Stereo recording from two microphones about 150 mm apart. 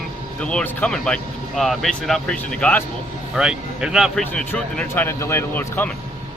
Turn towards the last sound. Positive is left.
turn(degrees=15)  # may be behind; listen again after turning